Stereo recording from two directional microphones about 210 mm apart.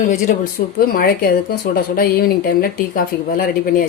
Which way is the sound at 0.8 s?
45° left (ahead or behind).